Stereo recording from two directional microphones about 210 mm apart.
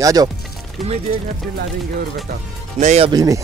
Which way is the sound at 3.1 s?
15° right (ahead or behind).